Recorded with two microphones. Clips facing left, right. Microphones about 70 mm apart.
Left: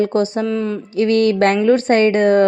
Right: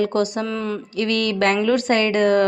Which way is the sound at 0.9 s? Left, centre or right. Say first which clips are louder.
Left 8 dB; left.